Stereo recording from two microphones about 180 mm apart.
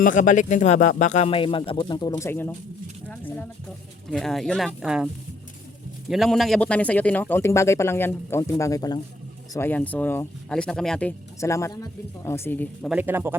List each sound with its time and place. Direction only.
0.0 s speech: 45° left (ahead or behind); by 5.0 s centre (ahead or behind)
6.1 s speech: centre (ahead or behind)
11.3 s speech: 15° left (ahead or behind)
12.9 s a man's voice: 10° right (ahead or behind)